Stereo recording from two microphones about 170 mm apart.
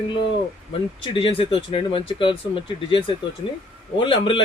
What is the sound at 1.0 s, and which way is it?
Speech, 30° left (ahead or behind).